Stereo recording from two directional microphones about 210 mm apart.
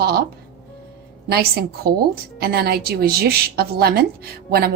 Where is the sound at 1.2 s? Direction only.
45° right (ahead or behind).